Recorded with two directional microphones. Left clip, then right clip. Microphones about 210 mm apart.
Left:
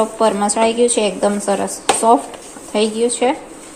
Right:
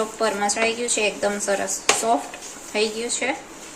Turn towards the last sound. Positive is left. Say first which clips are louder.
# left 8 dB
turn(degrees=20)  # may be behind; listen again after turning